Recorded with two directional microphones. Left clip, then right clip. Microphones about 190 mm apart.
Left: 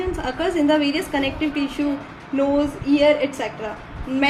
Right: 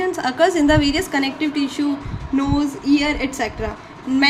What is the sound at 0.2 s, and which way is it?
A woman's voice, 45° right (ahead or behind).